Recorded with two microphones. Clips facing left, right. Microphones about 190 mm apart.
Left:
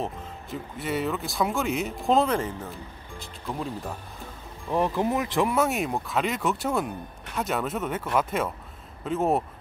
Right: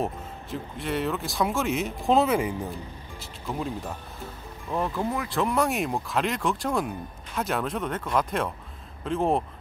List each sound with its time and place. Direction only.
0.0 s speech: centre (ahead or behind)
4.6 s speech: 20° left (ahead or behind)
5.5 s speech: centre (ahead or behind)